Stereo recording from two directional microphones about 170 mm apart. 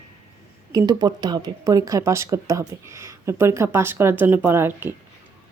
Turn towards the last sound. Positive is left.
turn(degrees=-10)  # may be behind; listen again after turning